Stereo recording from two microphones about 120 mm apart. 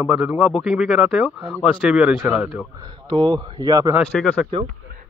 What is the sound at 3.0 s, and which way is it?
Speech, 40° right (ahead or behind).